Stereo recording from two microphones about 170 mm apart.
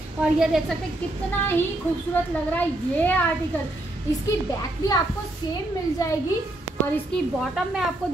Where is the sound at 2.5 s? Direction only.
10° left (ahead or behind).